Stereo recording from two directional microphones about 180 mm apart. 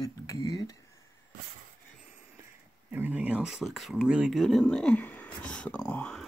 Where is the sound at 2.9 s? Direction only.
10° right (ahead or behind).